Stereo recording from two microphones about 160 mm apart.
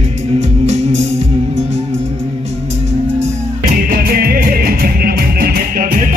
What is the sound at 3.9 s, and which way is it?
Music, 65° right (ahead or behind).